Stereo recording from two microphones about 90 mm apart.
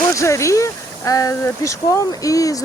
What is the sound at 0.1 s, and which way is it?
Speech, 35° left (ahead or behind).